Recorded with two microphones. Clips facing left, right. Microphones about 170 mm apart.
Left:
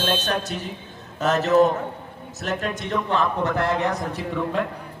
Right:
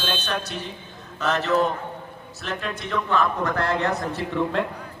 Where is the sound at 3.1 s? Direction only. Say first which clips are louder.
Even; 25° left (ahead or behind).